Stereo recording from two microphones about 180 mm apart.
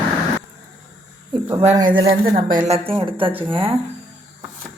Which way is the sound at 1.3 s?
15° right (ahead or behind).